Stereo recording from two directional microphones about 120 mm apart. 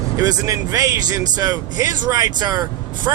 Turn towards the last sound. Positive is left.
turn(degrees=-35)  # may be behind; listen again after turning